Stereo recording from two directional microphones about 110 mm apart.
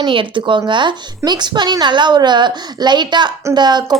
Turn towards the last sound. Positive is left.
turn(degrees=-40)  # may be behind; listen again after turning